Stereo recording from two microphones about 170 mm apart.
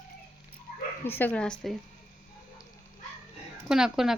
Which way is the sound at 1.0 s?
10° left (ahead or behind).